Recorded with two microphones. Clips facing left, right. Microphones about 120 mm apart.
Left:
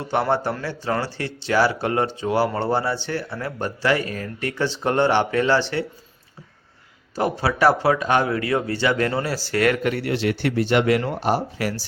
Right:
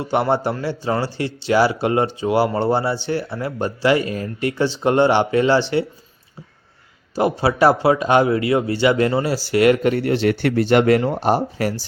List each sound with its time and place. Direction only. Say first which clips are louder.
0.0 s speech: right 3 dB; 15° right (ahead or behind)
7.2 s speech: right 4 dB; 15° right (ahead or behind)
9.9 s speech: right 5 dB; 35° right (ahead or behind)
10.4 s speech: right 3 dB; 50° right (ahead or behind)
11.1 s speech: right 4 dB; 30° right (ahead or behind)